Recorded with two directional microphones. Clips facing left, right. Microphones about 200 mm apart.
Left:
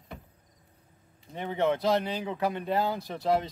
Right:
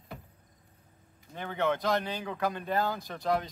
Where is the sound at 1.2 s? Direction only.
30° left (ahead or behind).